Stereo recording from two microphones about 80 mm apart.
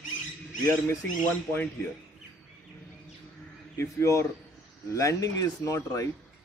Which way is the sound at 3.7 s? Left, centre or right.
Left.